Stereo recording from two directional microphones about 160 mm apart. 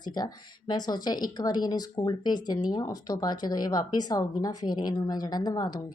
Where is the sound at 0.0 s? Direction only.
25° left (ahead or behind).